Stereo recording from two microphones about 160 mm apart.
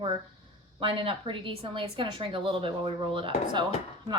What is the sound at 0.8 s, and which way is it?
A woman's voice, 35° right (ahead or behind).